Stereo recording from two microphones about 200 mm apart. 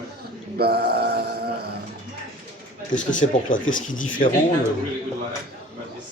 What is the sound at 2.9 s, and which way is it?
Speech, 40° left (ahead or behind).